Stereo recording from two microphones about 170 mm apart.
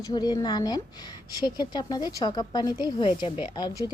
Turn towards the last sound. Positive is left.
turn(degrees=25)  # may be behind; listen again after turning